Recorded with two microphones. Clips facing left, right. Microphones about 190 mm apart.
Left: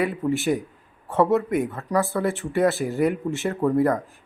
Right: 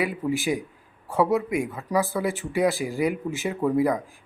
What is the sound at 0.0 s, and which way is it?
Speech, centre (ahead or behind).